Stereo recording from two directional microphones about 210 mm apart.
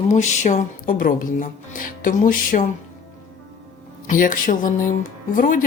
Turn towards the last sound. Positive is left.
turn(degrees=40)  # may be behind; listen again after turning